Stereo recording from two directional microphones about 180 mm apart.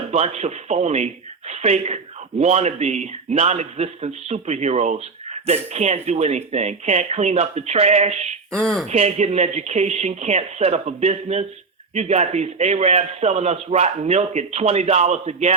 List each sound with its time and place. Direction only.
0.1 s a man's voice: 35° right (ahead or behind)
8.4 s speech: 5° left (ahead or behind)
8.9 s a man's voice: 40° right (ahead or behind)